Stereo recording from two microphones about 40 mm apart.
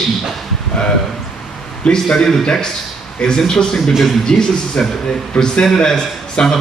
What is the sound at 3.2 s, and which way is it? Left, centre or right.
Speech, left.